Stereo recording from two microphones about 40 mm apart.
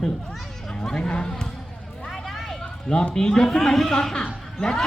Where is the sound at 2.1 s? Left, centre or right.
Centre.